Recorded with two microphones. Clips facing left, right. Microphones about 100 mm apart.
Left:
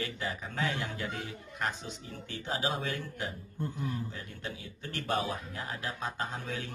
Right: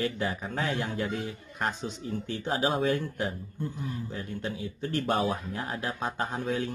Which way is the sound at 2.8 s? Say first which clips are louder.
Right 9 dB; 45° right (ahead or behind).